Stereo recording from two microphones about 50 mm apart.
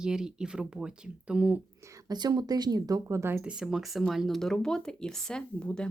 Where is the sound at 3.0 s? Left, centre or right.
Right.